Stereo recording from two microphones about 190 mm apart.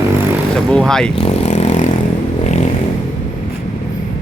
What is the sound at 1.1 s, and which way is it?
Vehicle, 30° left (ahead or behind).